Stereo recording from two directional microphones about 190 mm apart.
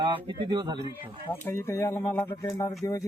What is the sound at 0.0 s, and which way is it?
Speech, 25° right (ahead or behind).